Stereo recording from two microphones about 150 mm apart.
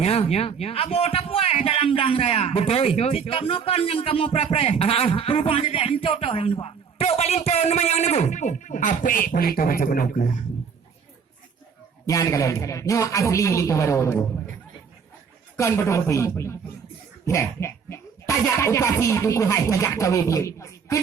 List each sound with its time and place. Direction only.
0.0 s speech: 45° left (ahead or behind); by 10.4 s 60° left (ahead or behind)
12.0 s speech: 20° left (ahead or behind)
15.5 s speech: 20° left (ahead or behind)